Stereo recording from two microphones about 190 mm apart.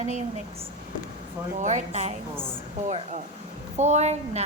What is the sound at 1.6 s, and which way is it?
A woman's voice, 40° right (ahead or behind).